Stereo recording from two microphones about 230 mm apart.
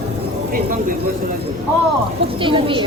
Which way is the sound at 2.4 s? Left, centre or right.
Right.